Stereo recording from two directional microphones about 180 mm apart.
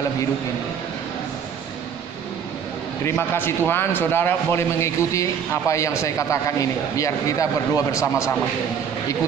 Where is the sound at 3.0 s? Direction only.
10° left (ahead or behind).